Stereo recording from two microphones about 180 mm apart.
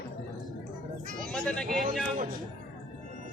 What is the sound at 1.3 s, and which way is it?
Speech, 5° left (ahead or behind).